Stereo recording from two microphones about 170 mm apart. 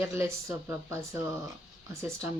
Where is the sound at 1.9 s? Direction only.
15° right (ahead or behind).